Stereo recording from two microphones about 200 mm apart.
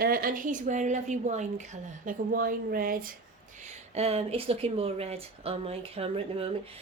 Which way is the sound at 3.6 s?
35° right (ahead or behind).